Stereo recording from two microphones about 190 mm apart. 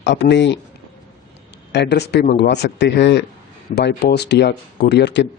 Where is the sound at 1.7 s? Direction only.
60° left (ahead or behind).